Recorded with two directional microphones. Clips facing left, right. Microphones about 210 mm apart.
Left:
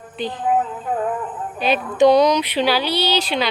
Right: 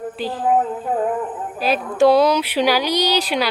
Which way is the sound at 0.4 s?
40° right (ahead or behind).